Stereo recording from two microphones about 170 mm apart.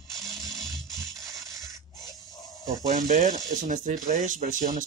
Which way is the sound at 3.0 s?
50° right (ahead or behind).